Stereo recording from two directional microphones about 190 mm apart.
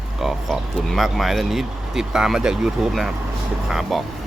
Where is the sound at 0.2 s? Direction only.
Centre (ahead or behind).